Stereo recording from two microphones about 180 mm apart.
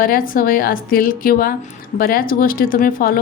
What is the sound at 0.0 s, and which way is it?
A woman's voice, 55° left (ahead or behind).